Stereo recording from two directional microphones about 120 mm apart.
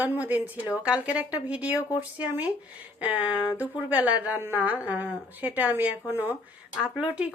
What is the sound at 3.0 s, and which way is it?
A woman's voice, 10° right (ahead or behind).